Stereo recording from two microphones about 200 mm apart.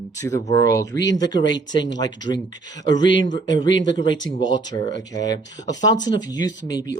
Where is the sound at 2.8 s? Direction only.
20° left (ahead or behind).